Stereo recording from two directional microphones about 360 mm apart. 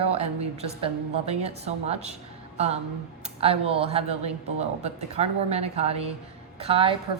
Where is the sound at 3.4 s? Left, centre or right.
Centre.